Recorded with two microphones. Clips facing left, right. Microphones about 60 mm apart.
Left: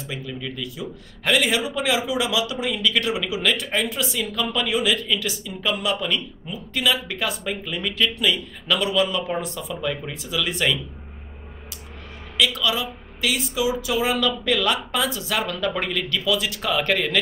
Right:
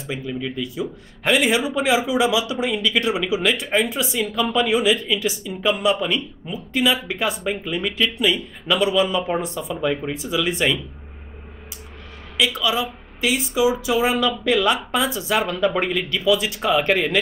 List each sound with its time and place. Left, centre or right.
0.1 s speech: centre
12.4 s speech: centre